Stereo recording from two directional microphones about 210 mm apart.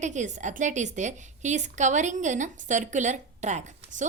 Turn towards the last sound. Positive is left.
turn(degrees=-35)  # may be behind; listen again after turning